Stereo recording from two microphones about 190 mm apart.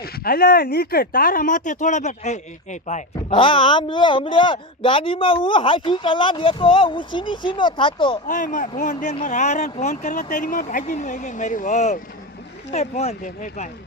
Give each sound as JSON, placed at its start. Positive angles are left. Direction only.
{"t": 0.0, "sound": "speech", "side_deg": 50}
{"t": 8.3, "sound": "speech", "side_deg": 40}